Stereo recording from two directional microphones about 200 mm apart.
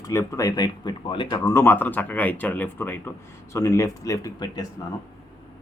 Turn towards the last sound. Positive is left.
turn(degrees=20)  # may be behind; listen again after turning